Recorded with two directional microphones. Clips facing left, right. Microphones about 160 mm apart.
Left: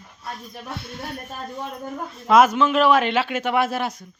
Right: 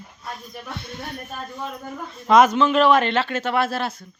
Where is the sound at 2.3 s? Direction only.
5° left (ahead or behind).